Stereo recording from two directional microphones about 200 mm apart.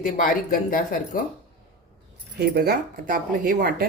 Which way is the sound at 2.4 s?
50° right (ahead or behind).